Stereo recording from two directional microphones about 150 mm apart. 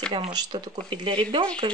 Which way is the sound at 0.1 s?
30° right (ahead or behind).